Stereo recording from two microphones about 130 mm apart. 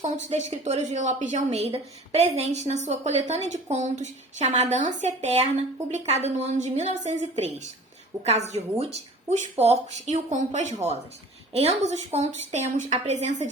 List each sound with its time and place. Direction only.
0.3 s speech: 60° right (ahead or behind)